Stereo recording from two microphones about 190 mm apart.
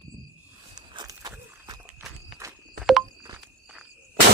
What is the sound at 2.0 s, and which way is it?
Walk, centre (ahead or behind).